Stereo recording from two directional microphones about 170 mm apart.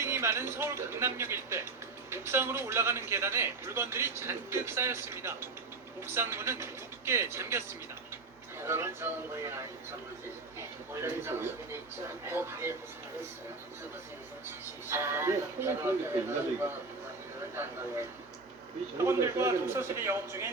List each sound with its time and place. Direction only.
0.0 s a man's voice: 15° right (ahead or behind)
14.8 s a man's voice: 15° right (ahead or behind)
17.5 s a man's voice: 15° right (ahead or behind)